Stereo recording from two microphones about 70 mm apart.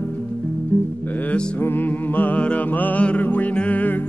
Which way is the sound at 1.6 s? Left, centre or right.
Left.